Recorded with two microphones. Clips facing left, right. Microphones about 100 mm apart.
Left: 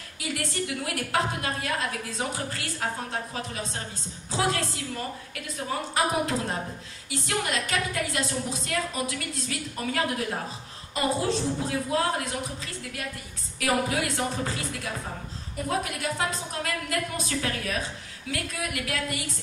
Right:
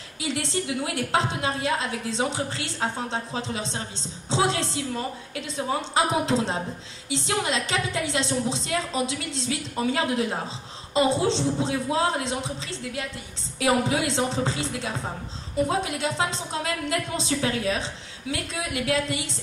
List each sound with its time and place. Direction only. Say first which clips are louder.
0.2 s a woman's voice: right 3 dB; 25° right (ahead or behind)